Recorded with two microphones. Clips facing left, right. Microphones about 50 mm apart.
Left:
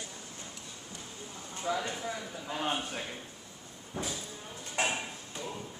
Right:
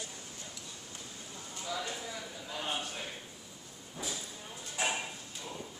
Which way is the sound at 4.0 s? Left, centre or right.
Left.